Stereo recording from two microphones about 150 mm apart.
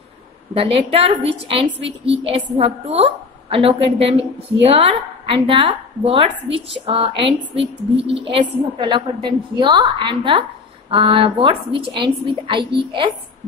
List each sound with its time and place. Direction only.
0.6 s a woman's voice: 40° right (ahead or behind)